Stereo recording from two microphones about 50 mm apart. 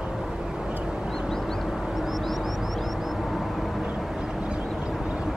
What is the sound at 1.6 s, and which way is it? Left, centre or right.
Vehicle, centre.